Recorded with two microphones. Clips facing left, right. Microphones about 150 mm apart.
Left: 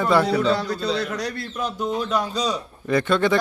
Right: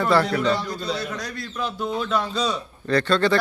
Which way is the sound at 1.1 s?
35° left (ahead or behind).